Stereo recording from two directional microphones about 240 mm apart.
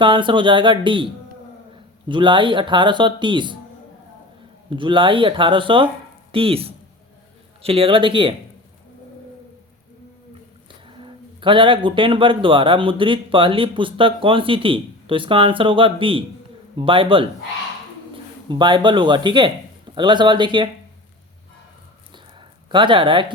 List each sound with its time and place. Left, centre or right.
0.0 s speech: centre
2.0 s speech: centre
4.7 s speech: right
10.8 s speech: right
18.4 s speech: centre
22.1 s a sound: centre